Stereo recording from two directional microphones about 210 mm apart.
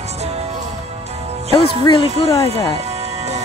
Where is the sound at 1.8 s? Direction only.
25° left (ahead or behind).